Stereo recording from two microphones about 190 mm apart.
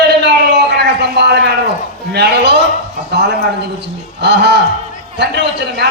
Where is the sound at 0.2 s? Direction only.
65° right (ahead or behind).